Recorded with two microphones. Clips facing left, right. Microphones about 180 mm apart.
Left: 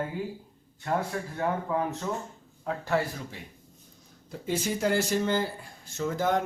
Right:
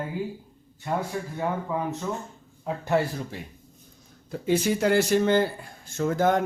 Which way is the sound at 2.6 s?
20° right (ahead or behind).